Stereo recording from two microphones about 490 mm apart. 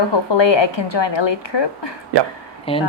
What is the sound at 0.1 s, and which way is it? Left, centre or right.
A woman's voice, left.